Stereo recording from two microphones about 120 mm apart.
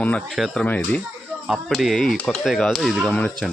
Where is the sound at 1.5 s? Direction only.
Centre (ahead or behind).